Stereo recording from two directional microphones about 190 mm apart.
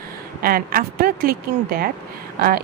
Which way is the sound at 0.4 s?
50° right (ahead or behind).